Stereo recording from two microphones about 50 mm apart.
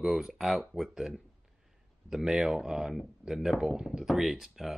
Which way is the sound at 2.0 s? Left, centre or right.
Centre.